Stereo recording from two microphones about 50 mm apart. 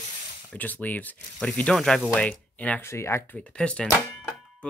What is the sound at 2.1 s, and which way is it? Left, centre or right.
Speech, left.